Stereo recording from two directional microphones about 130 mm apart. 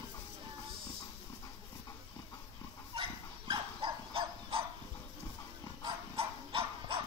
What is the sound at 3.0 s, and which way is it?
Dog, 40° right (ahead or behind).